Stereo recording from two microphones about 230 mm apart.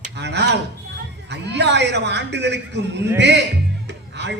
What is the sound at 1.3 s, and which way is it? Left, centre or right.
A man's voice, right.